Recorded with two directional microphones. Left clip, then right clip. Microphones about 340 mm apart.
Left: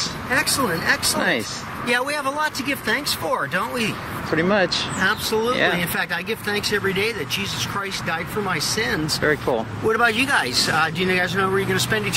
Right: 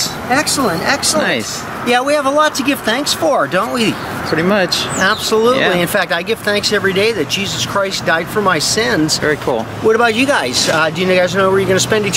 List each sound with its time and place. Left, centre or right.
0.3 s speech: centre
5.0 s speech: centre